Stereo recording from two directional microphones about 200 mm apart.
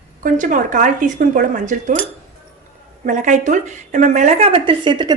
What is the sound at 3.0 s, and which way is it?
Speech, 40° right (ahead or behind).